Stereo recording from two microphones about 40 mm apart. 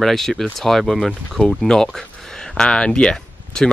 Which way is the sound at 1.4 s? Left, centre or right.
Centre.